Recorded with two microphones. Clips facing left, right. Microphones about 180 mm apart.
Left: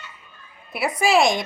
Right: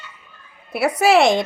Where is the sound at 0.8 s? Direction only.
70° right (ahead or behind).